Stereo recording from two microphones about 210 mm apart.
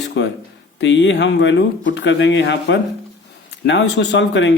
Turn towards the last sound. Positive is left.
turn(degrees=60)  # may be behind; listen again after turning